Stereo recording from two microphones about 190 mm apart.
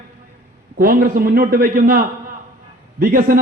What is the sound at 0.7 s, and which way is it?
A man's voice, 50° right (ahead or behind).